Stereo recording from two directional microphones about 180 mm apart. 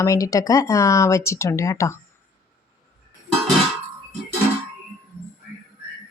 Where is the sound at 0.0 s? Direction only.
20° left (ahead or behind).